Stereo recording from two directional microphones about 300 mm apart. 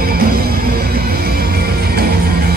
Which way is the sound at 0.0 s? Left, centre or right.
Right.